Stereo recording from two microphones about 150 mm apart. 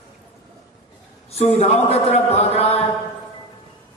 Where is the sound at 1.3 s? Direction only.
45° left (ahead or behind).